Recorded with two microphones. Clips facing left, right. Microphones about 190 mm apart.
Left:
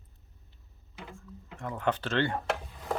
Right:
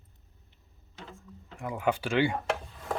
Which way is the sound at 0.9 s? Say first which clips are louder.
Left 1 dB; 10° left (ahead or behind).